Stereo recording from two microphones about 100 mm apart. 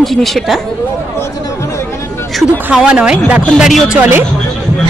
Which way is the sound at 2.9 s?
10° right (ahead or behind).